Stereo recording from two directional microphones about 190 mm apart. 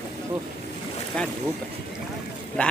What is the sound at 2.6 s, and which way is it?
Speech, 5° left (ahead or behind).